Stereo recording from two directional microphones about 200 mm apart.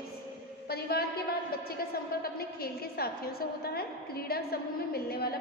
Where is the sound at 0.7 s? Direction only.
50° left (ahead or behind).